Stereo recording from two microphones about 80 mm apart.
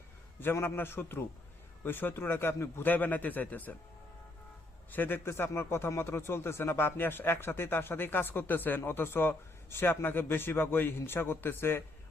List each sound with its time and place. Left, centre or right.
0.3 s a man's voice: left
4.9 s a man's voice: left